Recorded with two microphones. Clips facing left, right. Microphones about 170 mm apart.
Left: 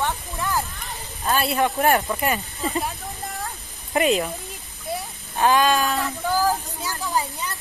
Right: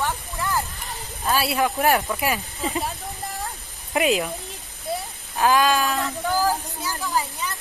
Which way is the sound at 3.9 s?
5° right (ahead or behind).